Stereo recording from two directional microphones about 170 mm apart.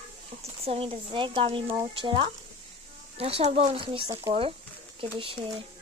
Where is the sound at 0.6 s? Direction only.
35° right (ahead or behind).